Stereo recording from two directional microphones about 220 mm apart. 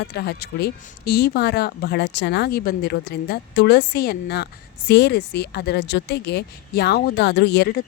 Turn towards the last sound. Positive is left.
turn(degrees=45)  # may be behind; listen again after turning